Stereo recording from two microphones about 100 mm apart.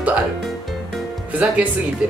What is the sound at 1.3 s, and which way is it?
Speech, 10° right (ahead or behind).